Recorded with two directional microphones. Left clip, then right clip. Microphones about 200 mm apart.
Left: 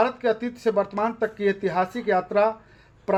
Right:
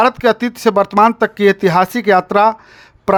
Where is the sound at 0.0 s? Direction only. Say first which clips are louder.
Right 10 dB; 45° right (ahead or behind).